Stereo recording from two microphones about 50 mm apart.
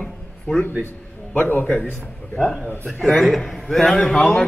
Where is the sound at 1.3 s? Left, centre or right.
Left.